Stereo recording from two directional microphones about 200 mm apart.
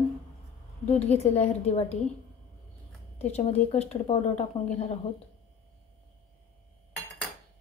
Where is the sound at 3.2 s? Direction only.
30° left (ahead or behind).